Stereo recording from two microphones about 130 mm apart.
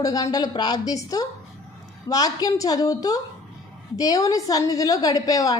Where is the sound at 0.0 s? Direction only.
30° left (ahead or behind).